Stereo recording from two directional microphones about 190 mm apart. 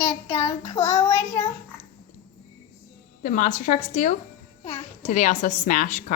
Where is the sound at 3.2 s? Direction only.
45° left (ahead or behind).